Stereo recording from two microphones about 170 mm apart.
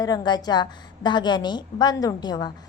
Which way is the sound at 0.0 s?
25° left (ahead or behind).